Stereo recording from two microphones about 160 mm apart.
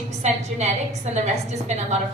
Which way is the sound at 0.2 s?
45° right (ahead or behind).